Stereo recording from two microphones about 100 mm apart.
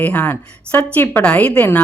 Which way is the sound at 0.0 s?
15° left (ahead or behind).